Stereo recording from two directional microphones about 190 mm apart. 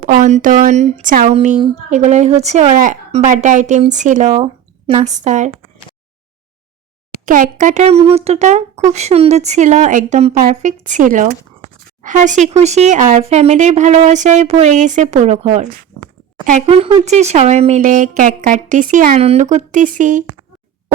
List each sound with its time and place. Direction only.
0.0 s speech: 45° right (ahead or behind)
7.3 s speech: 45° right (ahead or behind)